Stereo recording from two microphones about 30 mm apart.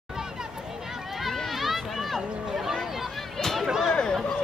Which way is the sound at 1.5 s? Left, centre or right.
Centre.